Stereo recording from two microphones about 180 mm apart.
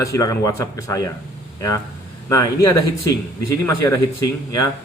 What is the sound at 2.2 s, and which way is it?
Speech, 20° left (ahead or behind).